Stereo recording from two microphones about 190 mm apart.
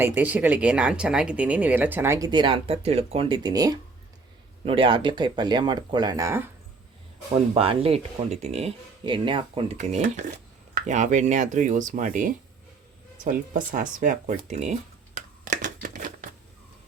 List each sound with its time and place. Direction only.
0.0 s speech: 10° right (ahead or behind)
7.5 s speech: 30° right (ahead or behind)
9.7 s speech: 40° right (ahead or behind)
15.4 s a sound: 40° right (ahead or behind)